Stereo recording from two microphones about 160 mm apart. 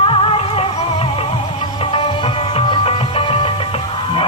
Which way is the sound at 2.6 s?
35° left (ahead or behind).